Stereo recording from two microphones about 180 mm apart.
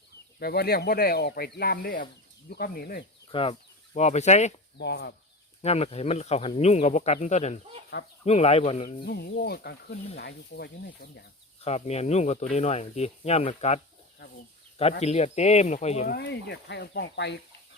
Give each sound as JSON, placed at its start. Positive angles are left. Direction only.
{"t": 0.3, "sound": "speech", "side_deg": 60}
{"t": 3.3, "sound": "speech", "side_deg": 30}
{"t": 4.8, "sound": "speech", "side_deg": 70}
{"t": 5.6, "sound": "speech", "side_deg": 35}
{"t": 9.0, "sound": "speech", "side_deg": 65}
{"t": 11.6, "sound": "speech", "side_deg": 35}
{"t": 16.0, "sound": "speech", "side_deg": 65}